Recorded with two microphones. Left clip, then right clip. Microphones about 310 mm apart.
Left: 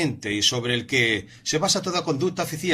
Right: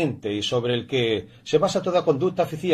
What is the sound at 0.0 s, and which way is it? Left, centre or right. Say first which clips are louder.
Speech: left 2 dB; left.